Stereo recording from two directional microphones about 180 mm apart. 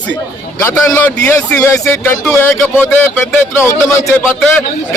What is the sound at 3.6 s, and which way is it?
Speech, 15° left (ahead or behind).